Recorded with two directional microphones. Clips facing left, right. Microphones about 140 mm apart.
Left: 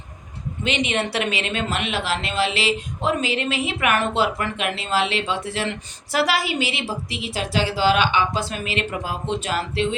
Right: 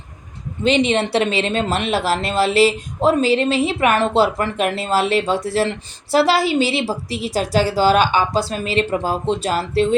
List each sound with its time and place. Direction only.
0.6 s speech: 35° right (ahead or behind)